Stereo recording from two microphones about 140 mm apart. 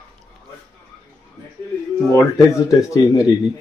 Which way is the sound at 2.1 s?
20° left (ahead or behind).